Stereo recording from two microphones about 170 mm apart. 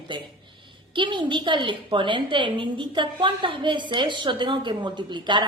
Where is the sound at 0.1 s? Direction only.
25° right (ahead or behind).